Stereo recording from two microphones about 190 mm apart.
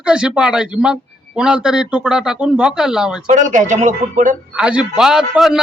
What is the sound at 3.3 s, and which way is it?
Speech, 40° right (ahead or behind).